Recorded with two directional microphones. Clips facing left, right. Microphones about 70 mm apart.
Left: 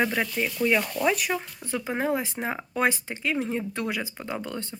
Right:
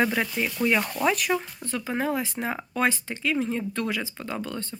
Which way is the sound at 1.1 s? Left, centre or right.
Centre.